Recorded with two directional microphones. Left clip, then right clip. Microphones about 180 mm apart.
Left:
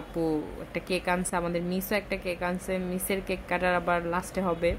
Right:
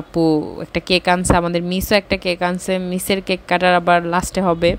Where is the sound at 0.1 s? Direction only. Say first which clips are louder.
Right 13 dB; 35° right (ahead or behind).